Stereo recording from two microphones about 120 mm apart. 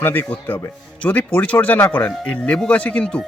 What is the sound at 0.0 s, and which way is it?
Speech, 15° left (ahead or behind).